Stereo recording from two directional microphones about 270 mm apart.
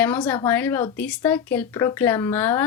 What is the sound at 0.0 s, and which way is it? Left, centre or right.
Speech, centre.